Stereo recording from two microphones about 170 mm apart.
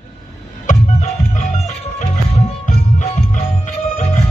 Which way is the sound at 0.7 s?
45° left (ahead or behind).